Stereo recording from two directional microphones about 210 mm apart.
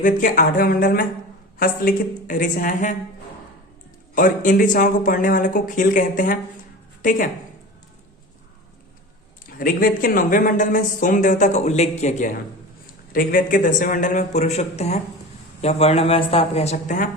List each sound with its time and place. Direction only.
0.0 s speech: 40° left (ahead or behind)
4.1 s a woman's voice: 40° left (ahead or behind)
9.6 s a woman's voice: 45° left (ahead or behind)